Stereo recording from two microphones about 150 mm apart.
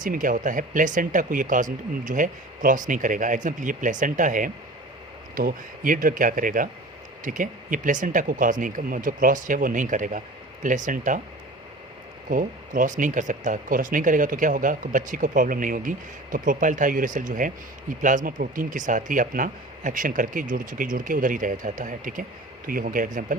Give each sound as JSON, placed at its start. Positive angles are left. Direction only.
{"t": 0.0, "sound": "speech", "side_deg": -65}
{"t": 12.3, "sound": "speech", "side_deg": -65}